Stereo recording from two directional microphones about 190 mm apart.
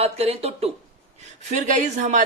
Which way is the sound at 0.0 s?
30° right (ahead or behind).